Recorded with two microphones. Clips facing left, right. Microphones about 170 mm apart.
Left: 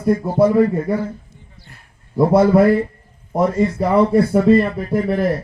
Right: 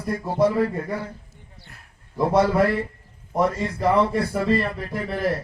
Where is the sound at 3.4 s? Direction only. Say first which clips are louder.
Left 6 dB; 40° left (ahead or behind).